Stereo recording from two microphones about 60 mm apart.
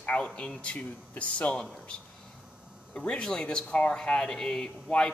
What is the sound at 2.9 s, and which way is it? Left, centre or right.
Speech, centre.